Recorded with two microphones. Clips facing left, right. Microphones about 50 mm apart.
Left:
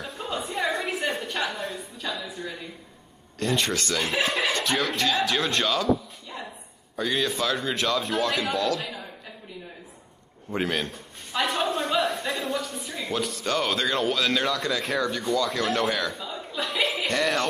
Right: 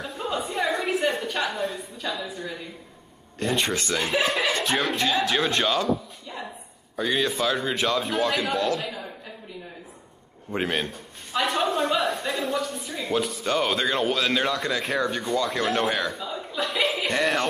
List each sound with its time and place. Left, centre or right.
0.0 s a sound: centre
3.3 s speech: centre
4.0 s speech: centre
7.0 s speech: centre
10.5 s speech: centre
15.0 s speech: right
15.5 s speech: centre
17.1 s speech: centre